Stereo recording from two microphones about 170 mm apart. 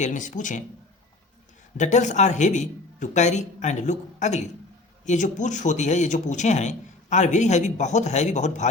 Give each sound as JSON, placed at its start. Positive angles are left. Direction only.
{"t": 0.0, "sound": "a man's voice", "side_deg": 50}
{"t": 1.8, "sound": "a man's voice", "side_deg": 45}